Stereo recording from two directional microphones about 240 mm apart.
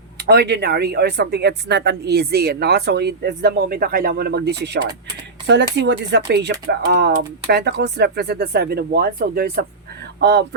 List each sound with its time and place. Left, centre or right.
0.2 s speech: right